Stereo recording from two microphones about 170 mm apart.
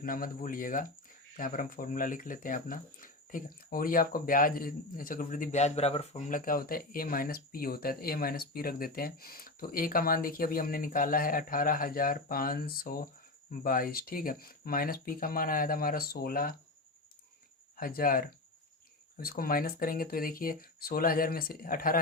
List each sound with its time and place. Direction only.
0.0 s speech: 55° left (ahead or behind)
17.7 s speech: 60° left (ahead or behind)